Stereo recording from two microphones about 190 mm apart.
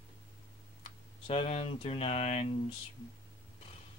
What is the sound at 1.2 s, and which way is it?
Speech, 30° left (ahead or behind).